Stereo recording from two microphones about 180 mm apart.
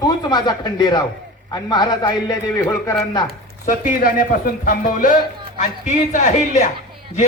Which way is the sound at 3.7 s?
45° left (ahead or behind).